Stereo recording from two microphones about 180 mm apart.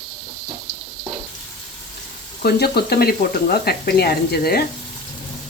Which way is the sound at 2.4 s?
60° left (ahead or behind).